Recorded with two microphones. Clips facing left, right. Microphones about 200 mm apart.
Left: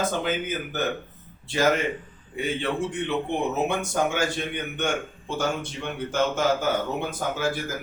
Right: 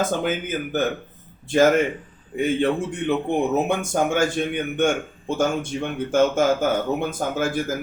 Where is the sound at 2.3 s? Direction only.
50° right (ahead or behind).